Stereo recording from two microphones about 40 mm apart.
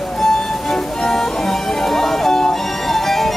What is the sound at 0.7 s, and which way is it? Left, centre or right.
Music, centre.